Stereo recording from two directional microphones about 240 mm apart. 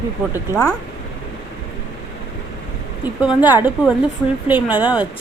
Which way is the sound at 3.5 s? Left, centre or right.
Centre.